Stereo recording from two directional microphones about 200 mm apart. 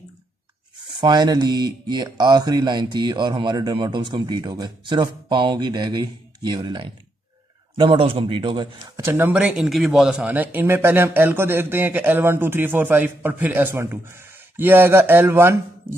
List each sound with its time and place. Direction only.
1.0 s speech: 20° right (ahead or behind)